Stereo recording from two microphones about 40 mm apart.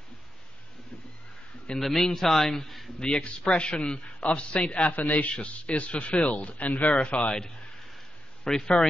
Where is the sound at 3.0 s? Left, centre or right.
Left.